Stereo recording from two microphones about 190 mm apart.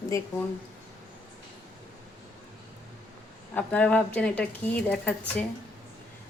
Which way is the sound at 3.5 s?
5° left (ahead or behind).